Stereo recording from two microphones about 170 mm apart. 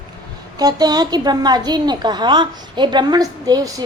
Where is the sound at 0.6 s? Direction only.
25° right (ahead or behind).